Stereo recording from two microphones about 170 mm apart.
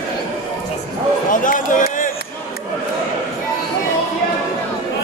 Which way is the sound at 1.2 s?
50° left (ahead or behind).